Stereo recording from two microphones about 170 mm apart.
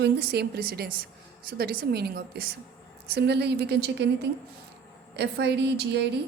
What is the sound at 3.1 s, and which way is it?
A woman's voice, 75° right (ahead or behind).